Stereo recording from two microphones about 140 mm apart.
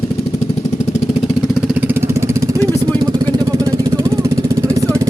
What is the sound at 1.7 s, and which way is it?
Vehicle, 15° right (ahead or behind).